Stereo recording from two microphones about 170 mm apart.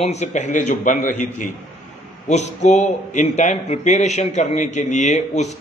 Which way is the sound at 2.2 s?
45° left (ahead or behind).